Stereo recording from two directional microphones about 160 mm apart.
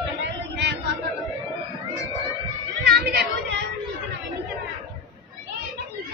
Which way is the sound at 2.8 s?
80° right.